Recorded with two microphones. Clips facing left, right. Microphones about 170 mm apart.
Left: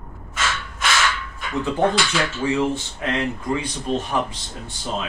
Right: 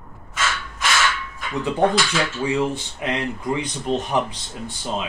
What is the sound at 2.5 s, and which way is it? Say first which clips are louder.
Speech: left 1 dB; 15° right (ahead or behind).